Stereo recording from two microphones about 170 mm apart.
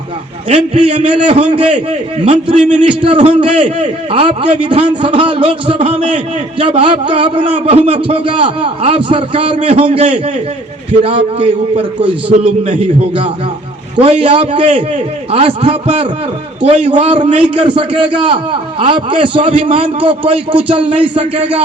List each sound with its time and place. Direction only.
0.4 s a man's voice: 45° right (ahead or behind)
1.5 s a man's voice: 30° right (ahead or behind)
9.3 s a man's voice: 45° right (ahead or behind)
9.7 s a man's voice: 30° right (ahead or behind)
14.0 s a man's voice: 35° right (ahead or behind)